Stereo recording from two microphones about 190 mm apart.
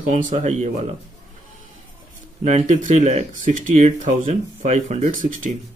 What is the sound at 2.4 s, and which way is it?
Speech, 35° right (ahead or behind).